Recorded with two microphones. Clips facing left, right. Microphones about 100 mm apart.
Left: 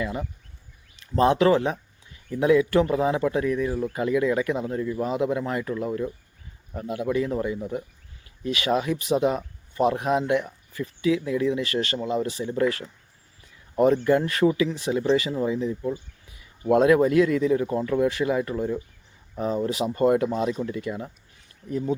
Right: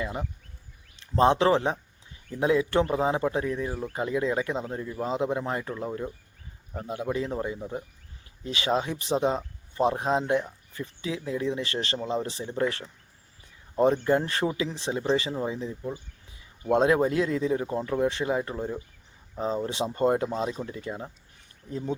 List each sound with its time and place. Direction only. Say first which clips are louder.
0.0 s speech: left 3 dB; 25° right (ahead or behind)
14.0 s speech: left 4 dB; 30° right (ahead or behind)
16.7 s speech: left 4 dB; 25° right (ahead or behind)